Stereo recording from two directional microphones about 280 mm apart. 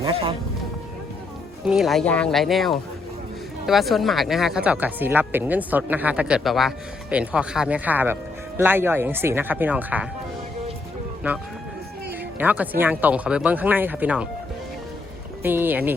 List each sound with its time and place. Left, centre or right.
0.0 s speech: centre
1.6 s speech: centre
12.4 s speech: centre
15.4 s speech: centre